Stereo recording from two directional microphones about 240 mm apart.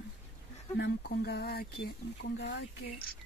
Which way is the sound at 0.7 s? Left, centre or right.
Left.